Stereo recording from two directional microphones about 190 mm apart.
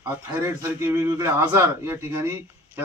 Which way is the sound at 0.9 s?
15° right (ahead or behind).